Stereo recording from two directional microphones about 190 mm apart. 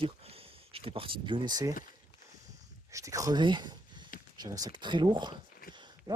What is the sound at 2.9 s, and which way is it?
Speech, 15° right (ahead or behind).